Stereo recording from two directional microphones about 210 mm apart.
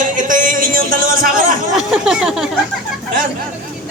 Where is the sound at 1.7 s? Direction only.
5° right (ahead or behind).